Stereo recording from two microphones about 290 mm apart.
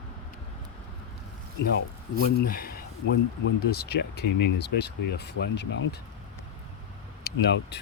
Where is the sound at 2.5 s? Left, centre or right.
Left.